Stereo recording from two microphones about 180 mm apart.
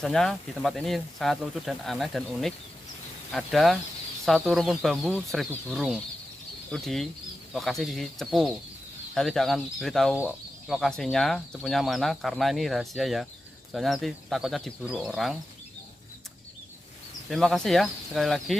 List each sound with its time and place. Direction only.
0.0 s speech: centre (ahead or behind)
17.3 s speech: centre (ahead or behind)